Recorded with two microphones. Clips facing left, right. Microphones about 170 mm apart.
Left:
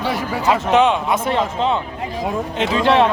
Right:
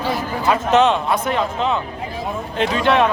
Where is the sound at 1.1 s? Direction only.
25° left (ahead or behind).